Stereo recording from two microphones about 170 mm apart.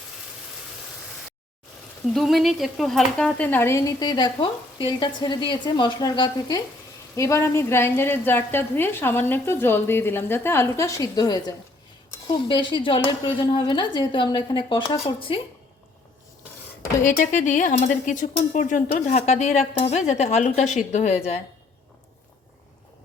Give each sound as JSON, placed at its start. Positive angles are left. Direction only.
{"t": 2.1, "sound": "speech", "side_deg": 0}
{"t": 17.0, "sound": "speech", "side_deg": 50}